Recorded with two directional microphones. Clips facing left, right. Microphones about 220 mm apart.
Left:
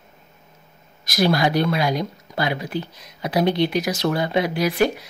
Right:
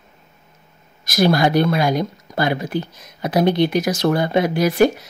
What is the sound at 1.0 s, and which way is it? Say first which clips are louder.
Speech: right 3 dB; 50° right (ahead or behind).